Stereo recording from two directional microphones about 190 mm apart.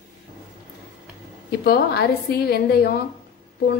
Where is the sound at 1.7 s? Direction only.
55° left (ahead or behind).